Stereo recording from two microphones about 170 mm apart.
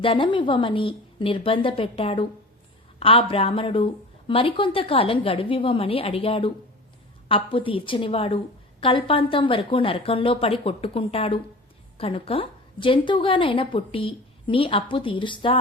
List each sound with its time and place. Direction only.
0.0 s a woman's voice: 30° left (ahead or behind)